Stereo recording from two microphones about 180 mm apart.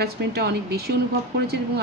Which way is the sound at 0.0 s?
60° right (ahead or behind).